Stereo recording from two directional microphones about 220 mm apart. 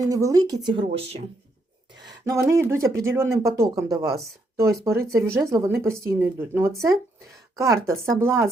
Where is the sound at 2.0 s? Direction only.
15° right (ahead or behind).